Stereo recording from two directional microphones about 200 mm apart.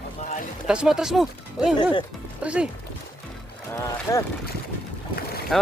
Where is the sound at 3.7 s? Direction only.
15° left (ahead or behind).